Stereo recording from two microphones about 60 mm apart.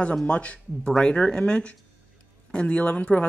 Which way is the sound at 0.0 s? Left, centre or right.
Centre.